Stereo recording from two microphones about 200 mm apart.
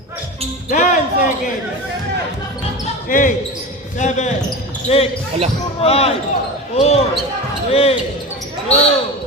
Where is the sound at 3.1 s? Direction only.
40° left (ahead or behind).